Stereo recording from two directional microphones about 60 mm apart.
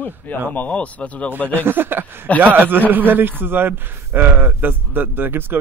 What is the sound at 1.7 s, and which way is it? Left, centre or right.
Speech, right.